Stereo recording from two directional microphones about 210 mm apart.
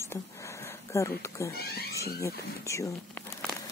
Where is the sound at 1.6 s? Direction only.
50° left (ahead or behind).